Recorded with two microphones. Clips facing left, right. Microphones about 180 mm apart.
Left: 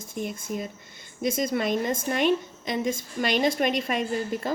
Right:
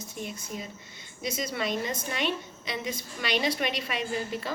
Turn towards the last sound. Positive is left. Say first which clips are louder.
# left 4 dB
turn(degrees=50)  # may be behind; listen again after turning